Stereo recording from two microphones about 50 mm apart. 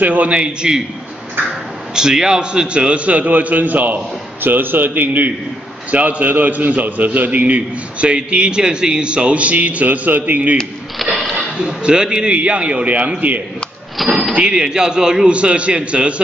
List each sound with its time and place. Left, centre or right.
0.0 s a man's voice: right
2.0 s a man's voice: centre; by 10.6 s right
11.0 s a sound: centre
11.5 s a man's voice: centre
13.9 s speech: centre
14.3 s a man's voice: centre